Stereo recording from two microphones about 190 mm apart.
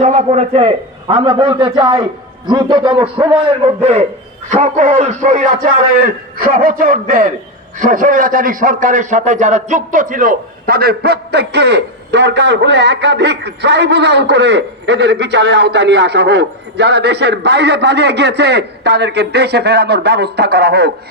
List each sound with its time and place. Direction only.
0.0 s a man's voice: 35° right (ahead or behind)
6.7 s a man's voice: 45° right (ahead or behind)